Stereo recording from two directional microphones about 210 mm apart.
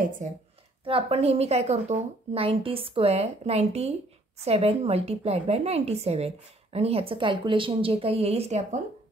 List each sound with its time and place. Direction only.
0.2 s a woman's voice: 35° right (ahead or behind)